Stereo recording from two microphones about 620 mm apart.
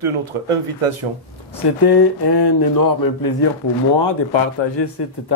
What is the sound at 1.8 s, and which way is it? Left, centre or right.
Speech, left.